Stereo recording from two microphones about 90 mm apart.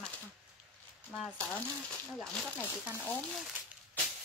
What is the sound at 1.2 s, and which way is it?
Speech, 20° left (ahead or behind).